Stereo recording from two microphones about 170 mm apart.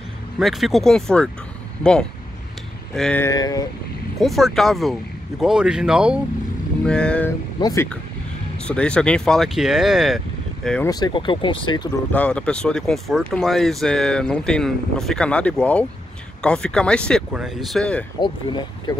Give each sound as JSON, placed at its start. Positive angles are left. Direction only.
{"t": 0.4, "sound": "speech", "side_deg": 0}
{"t": 3.2, "sound": "speech", "side_deg": 20}
{"t": 4.2, "sound": "speech", "side_deg": 0}
{"t": 6.9, "sound": "speech", "side_deg": 5}
{"t": 7.6, "sound": "speech", "side_deg": 15}
{"t": 10.9, "sound": "speech", "side_deg": 20}
{"t": 12.1, "sound": "speech", "side_deg": 5}
{"t": 18.2, "sound": "speech", "side_deg": 30}